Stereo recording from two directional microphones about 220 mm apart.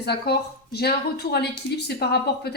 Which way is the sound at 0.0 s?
45° left (ahead or behind).